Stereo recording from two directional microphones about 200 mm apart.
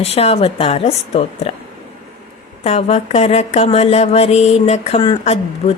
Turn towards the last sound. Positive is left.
turn(degrees=30)  # may be behind; listen again after turning